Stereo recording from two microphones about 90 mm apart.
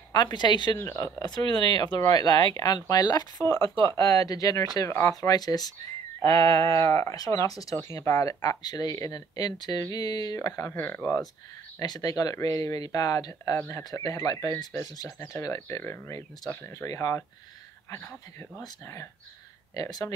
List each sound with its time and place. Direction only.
0.1 s speech: 55° left (ahead or behind)
0.7 s speech: 35° left (ahead or behind)
1.5 s speech: 55° left (ahead or behind)
2.0 s speech: 45° left (ahead or behind)
6.7 s speech: 30° left (ahead or behind)
10.7 s speech: 25° left (ahead or behind)
11.8 s speech: 45° left (ahead or behind)
13.6 s speech: 30° left (ahead or behind)
13.8 s speech: 40° left (ahead or behind)
15.0 s speech: 25° left (ahead or behind)
15.4 s speech: 35° left (ahead or behind)
19.7 s speech: 45° left (ahead or behind)